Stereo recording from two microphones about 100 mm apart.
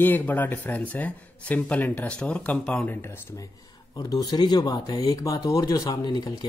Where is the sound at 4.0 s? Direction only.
40° left (ahead or behind).